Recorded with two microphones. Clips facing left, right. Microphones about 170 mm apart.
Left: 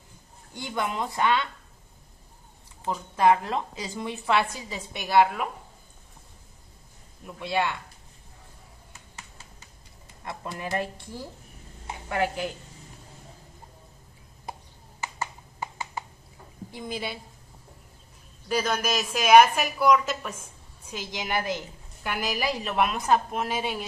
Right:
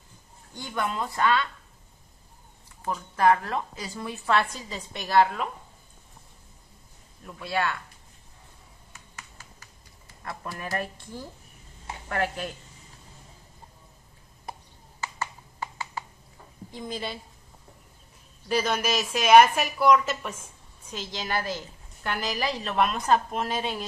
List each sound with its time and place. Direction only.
0.6 s a woman's voice: 15° left (ahead or behind)
2.8 s a woman's voice: 15° left (ahead or behind)
7.2 s speech: 20° left (ahead or behind)
9.1 s a sound: 25° left (ahead or behind)
11.9 s a woman's voice: 15° left (ahead or behind)
15.0 s finger snapping: 20° left (ahead or behind)
16.7 s a woman's voice: 5° left (ahead or behind)
18.5 s a woman's voice: centre (ahead or behind)
20.9 s a woman's voice: 15° left (ahead or behind)